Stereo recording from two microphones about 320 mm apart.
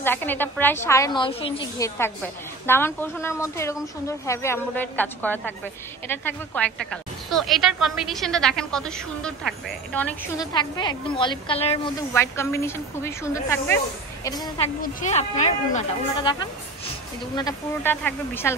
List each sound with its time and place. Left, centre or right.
0.0 s a woman's voice: centre
12.1 s a woman's voice: centre
14.8 s a woman's voice: left; by 18.5 s centre